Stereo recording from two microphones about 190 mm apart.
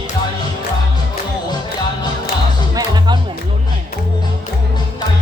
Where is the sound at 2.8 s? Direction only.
20° right (ahead or behind).